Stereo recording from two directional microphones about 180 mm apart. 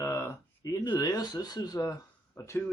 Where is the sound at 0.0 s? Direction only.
15° left (ahead or behind).